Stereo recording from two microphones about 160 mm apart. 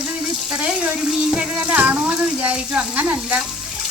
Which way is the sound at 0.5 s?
5° right (ahead or behind).